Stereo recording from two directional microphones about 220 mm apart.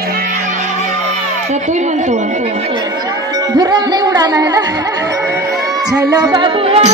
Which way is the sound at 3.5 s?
20° right (ahead or behind).